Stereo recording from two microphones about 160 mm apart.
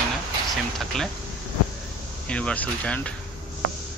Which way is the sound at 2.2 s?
5° left (ahead or behind).